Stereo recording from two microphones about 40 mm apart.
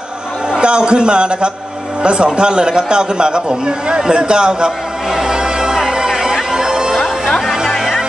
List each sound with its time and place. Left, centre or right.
0.5 s a man's voice: right
7.0 s music: centre